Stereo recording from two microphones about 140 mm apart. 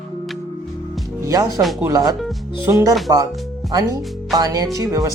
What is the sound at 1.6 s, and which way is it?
Speech, centre (ahead or behind).